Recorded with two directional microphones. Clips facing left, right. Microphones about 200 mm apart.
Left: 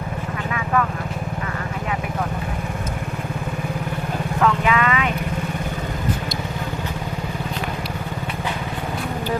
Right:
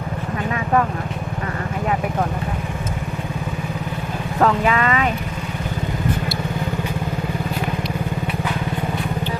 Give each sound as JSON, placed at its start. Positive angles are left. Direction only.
{"t": 0.5, "sound": "vehicle", "side_deg": -35}
{"t": 4.4, "sound": "vehicle", "side_deg": -40}